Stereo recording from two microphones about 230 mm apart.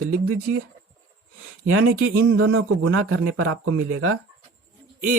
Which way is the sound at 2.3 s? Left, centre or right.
Right.